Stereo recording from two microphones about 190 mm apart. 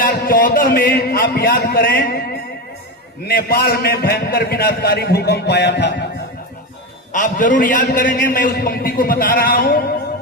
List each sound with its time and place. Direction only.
0.0 s a man's voice: 50° left (ahead or behind); by 6.1 s 65° left (ahead or behind)
7.1 s a man's voice: 45° left (ahead or behind)